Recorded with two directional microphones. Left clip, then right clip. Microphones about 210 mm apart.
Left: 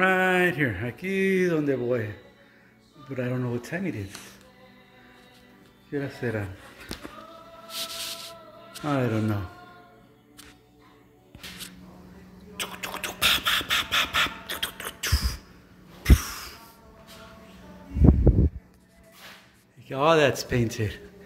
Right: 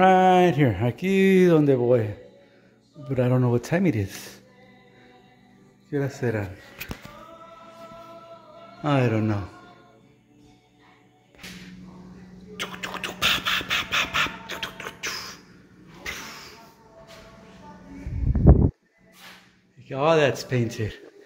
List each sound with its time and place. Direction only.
0.0 s speech: 20° right (ahead or behind)
3.1 s speech: 25° right (ahead or behind)
5.9 s speech: 5° right (ahead or behind)
8.8 s speech: 5° left (ahead or behind)
12.5 s a sound: centre (ahead or behind); by 16.5 s 25° left (ahead or behind)
19.9 s speech: 10° left (ahead or behind)